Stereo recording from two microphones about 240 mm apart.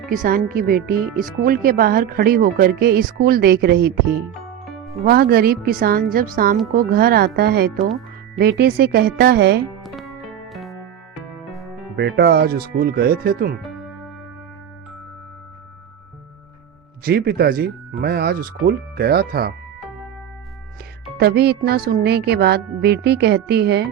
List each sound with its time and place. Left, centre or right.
0.1 s speech: right
9.8 s music: centre
11.9 s speech: right
17.0 s speech: right
21.2 s speech: right